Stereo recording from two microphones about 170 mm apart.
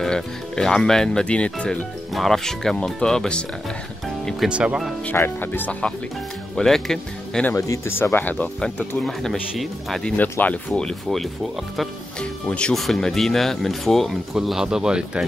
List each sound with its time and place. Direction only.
0.0 s speech: 5° left (ahead or behind)
5.0 s speech: 10° left (ahead or behind)
7.5 s speech: 20° left (ahead or behind); by 15.2 s 5° right (ahead or behind)